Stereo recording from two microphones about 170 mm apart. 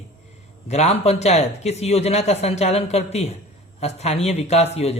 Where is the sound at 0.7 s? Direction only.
40° left (ahead or behind).